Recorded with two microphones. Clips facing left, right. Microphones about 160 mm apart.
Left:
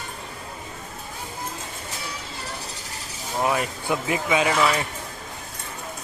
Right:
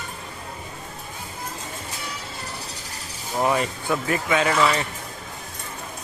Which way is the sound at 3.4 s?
Centre (ahead or behind).